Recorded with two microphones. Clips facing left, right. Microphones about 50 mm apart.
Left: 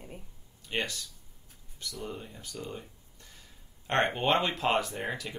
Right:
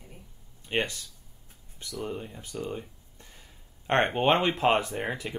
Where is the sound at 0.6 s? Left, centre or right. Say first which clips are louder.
Right 4 dB; right.